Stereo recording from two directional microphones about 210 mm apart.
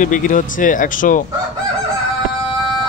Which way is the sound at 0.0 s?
40° left (ahead or behind).